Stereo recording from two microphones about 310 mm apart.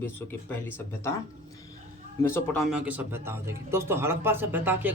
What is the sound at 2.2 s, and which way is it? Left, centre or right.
Speech, centre.